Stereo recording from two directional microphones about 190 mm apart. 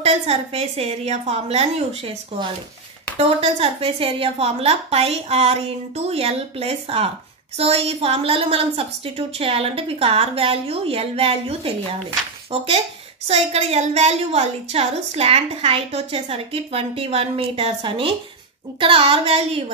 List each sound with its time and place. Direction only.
0.0 s a woman's voice: 35° right (ahead or behind)